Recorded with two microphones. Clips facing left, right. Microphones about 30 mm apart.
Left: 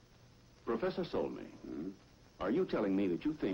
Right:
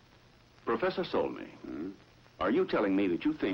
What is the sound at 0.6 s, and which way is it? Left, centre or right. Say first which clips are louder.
A man's voice: right 5 dB; right.